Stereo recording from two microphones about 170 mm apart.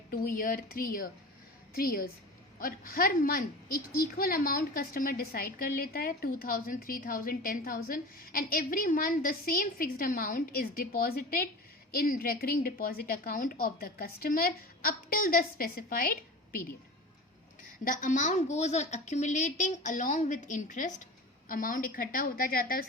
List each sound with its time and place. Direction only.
0.1 s a woman's voice: 55° left (ahead or behind)
17.8 s a woman's voice: 50° left (ahead or behind)